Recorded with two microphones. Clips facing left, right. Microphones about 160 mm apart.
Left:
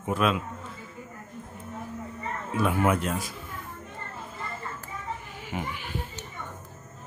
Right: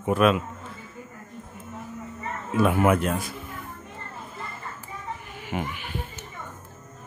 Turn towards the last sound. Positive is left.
turn(degrees=-60)  # may be behind; listen again after turning